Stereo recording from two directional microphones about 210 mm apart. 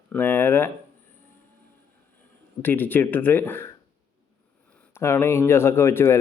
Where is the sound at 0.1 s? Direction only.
10° left (ahead or behind).